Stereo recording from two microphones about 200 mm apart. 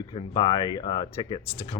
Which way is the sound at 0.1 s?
25° left (ahead or behind).